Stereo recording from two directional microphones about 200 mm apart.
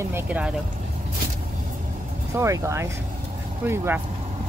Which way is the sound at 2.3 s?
15° right (ahead or behind).